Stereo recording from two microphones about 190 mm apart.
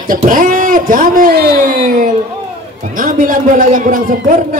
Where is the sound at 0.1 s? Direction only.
45° right (ahead or behind).